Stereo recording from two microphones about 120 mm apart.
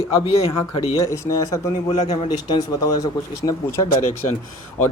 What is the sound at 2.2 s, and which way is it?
Speech, 35° left (ahead or behind).